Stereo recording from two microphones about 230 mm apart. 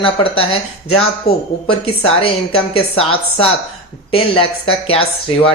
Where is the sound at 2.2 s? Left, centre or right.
Left.